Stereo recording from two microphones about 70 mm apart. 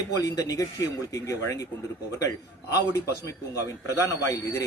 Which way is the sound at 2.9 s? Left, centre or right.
Left.